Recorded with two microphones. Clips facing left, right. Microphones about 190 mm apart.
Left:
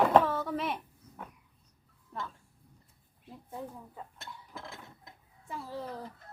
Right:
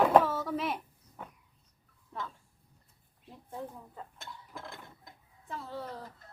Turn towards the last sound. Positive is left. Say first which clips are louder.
# left 1 dB
turn(degrees=10)  # may be behind; listen again after turning